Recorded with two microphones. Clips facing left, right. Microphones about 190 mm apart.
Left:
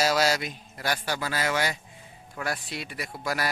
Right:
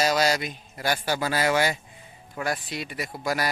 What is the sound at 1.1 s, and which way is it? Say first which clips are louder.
Speech: right 4 dB; 30° right (ahead or behind).